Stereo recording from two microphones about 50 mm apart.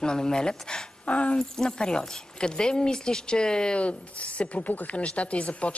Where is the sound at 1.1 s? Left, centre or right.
Left.